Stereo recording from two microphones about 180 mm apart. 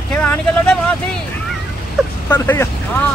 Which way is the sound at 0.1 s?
5° left (ahead or behind).